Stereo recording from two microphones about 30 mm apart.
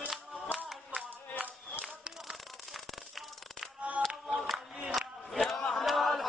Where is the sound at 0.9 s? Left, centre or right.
Right.